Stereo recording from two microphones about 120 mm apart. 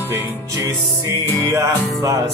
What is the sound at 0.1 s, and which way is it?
Music, 25° right (ahead or behind).